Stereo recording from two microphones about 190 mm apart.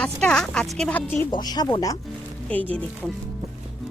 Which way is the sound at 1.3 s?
20° left (ahead or behind).